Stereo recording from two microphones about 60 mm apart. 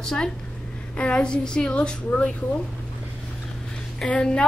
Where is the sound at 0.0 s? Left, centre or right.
Centre.